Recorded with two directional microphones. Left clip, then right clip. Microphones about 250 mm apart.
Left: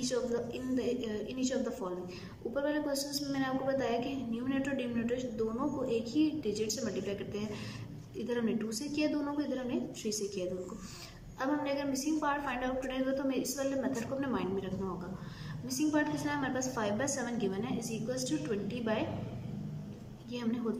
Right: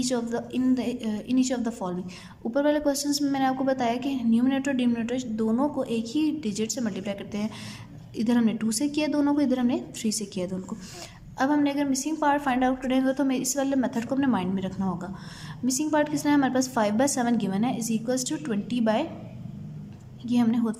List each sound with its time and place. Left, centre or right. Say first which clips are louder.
0.1 s a woman's voice: right 5 dB; right
20.2 s a woman's voice: right 12 dB; right